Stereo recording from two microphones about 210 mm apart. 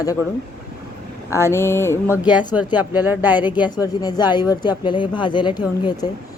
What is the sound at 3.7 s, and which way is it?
A woman's voice, 20° left (ahead or behind).